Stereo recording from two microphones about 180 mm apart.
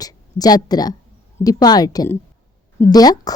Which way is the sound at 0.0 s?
20° left (ahead or behind).